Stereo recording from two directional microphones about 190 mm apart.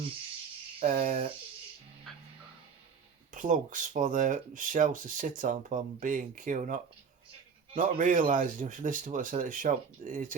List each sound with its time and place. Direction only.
0.8 s speech: 40° right (ahead or behind)
3.3 s speech: 45° right (ahead or behind)
7.8 s speech: 45° right (ahead or behind)